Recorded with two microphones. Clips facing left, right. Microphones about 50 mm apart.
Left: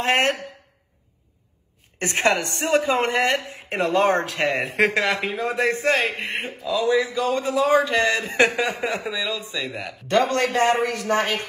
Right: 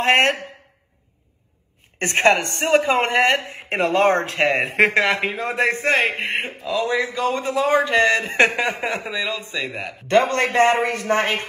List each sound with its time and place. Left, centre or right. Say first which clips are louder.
0.0 s a woman's voice: right 4 dB; right
2.0 s a woman's voice: right 4 dB; right